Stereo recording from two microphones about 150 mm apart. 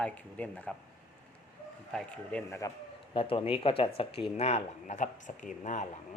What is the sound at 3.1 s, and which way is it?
Speech, 35° left (ahead or behind).